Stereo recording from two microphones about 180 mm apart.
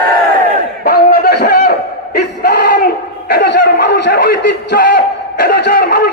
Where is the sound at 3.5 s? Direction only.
70° left (ahead or behind).